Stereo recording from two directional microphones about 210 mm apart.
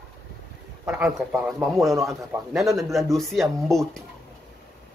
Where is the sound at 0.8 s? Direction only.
5° right (ahead or behind).